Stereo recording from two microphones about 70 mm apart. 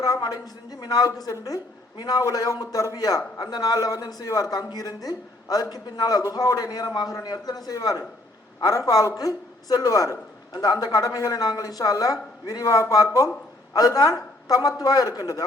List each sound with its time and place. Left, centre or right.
0.0 s a man's voice: left
2.3 s speech: left
5.7 s a man's voice: left
6.3 s a man's voice: left
10.5 s speech: left